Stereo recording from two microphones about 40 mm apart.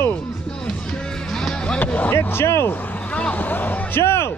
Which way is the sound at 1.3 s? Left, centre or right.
Centre.